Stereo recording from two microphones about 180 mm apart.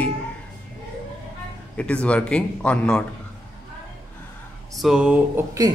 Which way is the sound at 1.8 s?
5° left (ahead or behind).